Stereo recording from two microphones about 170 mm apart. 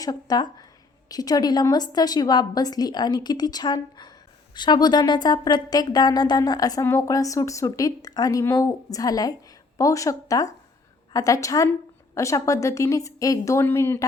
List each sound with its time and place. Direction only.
0.0 s speech: 25° left (ahead or behind)